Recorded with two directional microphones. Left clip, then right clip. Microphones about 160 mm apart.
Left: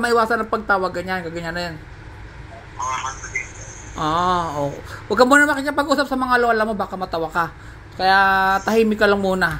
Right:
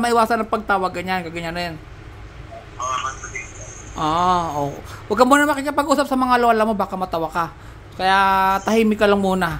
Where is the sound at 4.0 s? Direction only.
5° right (ahead or behind).